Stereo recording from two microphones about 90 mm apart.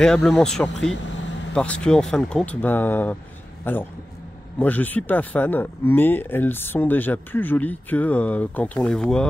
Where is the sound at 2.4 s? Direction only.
20° left (ahead or behind).